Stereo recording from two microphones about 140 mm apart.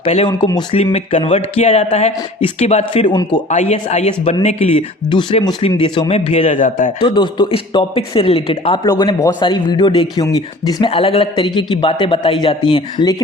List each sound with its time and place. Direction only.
0.0 s speech: 45° left (ahead or behind)
0.3 s a man's voice: 30° left (ahead or behind)
0.9 s speech: 55° left (ahead or behind)
3.5 s speech: 55° left (ahead or behind)
5.0 s a man's voice: 35° left (ahead or behind)
6.6 s speech: 65° left (ahead or behind)
7.0 s a man's voice: 35° left (ahead or behind)